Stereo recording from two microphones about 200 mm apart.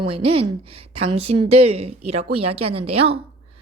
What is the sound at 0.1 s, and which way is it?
Speech, 30° right (ahead or behind).